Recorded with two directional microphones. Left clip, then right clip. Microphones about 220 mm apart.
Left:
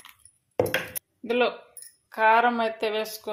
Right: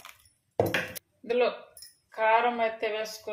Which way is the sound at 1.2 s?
35° left (ahead or behind).